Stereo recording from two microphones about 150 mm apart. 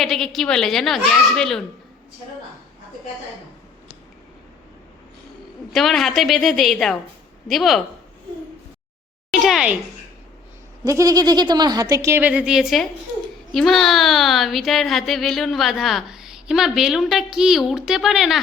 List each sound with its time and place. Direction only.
0.0 s a woman's voice: centre (ahead or behind)
5.7 s a woman's voice: centre (ahead or behind)
9.3 s a sound: centre (ahead or behind)
10.8 s a woman's voice: 20° right (ahead or behind); by 18.3 s centre (ahead or behind)